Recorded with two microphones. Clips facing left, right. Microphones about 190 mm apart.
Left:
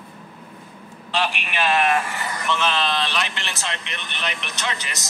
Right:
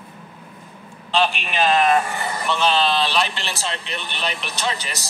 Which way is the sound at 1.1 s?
30° right (ahead or behind).